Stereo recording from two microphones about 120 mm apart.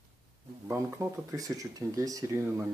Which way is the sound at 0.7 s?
25° right (ahead or behind).